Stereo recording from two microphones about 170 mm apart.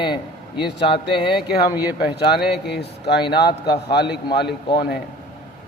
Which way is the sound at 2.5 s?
80° left.